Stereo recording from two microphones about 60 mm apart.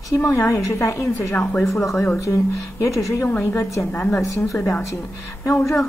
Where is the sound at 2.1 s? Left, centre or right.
Left.